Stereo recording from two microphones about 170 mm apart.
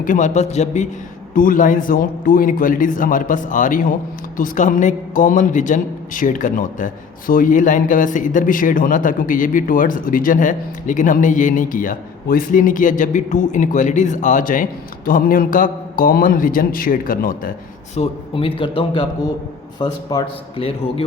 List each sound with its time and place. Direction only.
0.0 s a man's voice: 50° left (ahead or behind)
17.9 s a man's voice: 35° left (ahead or behind)
20.6 s speech: 35° left (ahead or behind)